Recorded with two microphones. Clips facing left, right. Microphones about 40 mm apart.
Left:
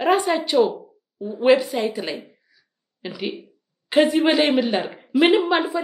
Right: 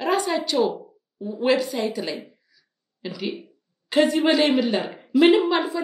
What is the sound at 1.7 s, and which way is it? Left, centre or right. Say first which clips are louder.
Speech: left 2 dB; left.